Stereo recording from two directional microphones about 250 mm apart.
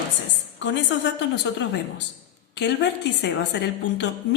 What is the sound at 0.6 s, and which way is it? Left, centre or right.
A woman's voice, left.